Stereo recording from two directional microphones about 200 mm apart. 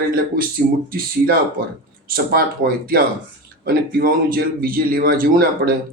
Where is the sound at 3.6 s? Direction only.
45° right (ahead or behind).